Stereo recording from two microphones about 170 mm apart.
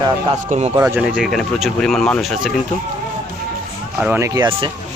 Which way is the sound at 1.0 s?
Centre (ahead or behind).